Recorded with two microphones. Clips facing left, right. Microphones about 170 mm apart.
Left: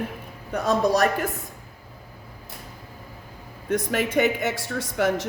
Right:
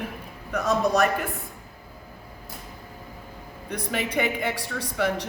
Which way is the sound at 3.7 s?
50° left (ahead or behind).